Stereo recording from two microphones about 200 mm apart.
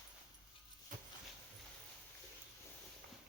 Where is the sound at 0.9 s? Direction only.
40° right (ahead or behind).